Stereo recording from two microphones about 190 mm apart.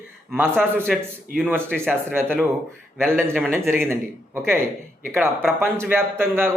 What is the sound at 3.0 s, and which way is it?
Speech, 5° left (ahead or behind).